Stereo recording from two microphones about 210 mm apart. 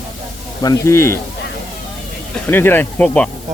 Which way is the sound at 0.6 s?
15° left (ahead or behind).